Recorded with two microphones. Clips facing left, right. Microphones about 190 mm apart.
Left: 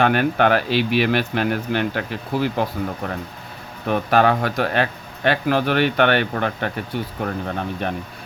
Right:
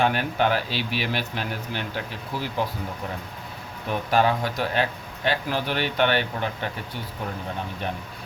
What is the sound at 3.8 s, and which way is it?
Speech, 65° left (ahead or behind).